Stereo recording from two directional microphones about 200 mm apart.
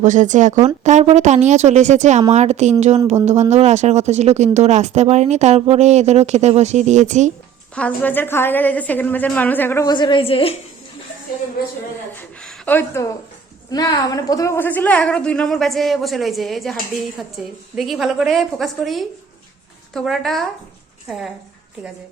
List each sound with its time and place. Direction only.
0.0 s a woman's voice: 40° right (ahead or behind)
7.8 s a woman's voice: 10° left (ahead or behind); by 10.6 s 30° left (ahead or behind)
12.1 s a sound: 5° left (ahead or behind)
13.7 s a woman's voice: 20° left (ahead or behind); by 20.5 s centre (ahead or behind)